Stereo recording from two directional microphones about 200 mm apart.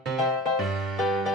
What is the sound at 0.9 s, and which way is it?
Music, centre (ahead or behind).